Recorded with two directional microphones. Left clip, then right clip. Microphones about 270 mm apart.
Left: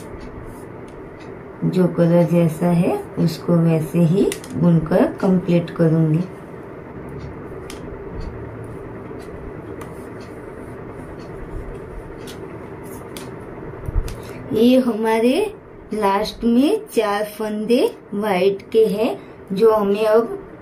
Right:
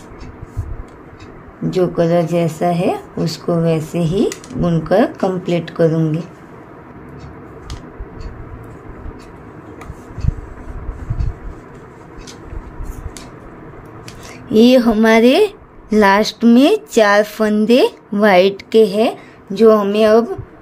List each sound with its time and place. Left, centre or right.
1.7 s a woman's voice: right
14.6 s a woman's voice: right